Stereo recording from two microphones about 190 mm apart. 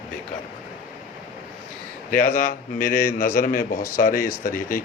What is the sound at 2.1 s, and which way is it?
A man's voice, 45° left (ahead or behind).